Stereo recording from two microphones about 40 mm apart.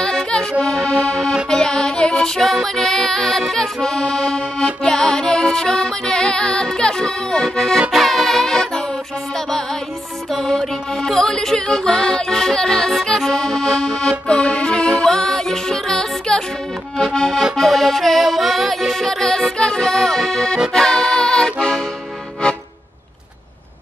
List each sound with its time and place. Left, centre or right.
0.0 s music: centre
2.6 s accordion: centre
7.4 s music: centre
10.3 s accordion: centre
14.2 s music: left
17.6 s music: centre
19.8 s accordion: centre